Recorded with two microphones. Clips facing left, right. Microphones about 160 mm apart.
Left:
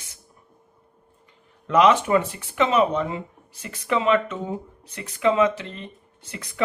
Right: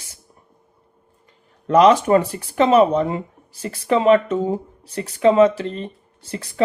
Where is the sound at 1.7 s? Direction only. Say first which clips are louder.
Right 4 dB; 35° right (ahead or behind).